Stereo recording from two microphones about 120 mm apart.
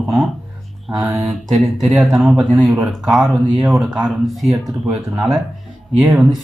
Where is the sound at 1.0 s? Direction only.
20° right (ahead or behind).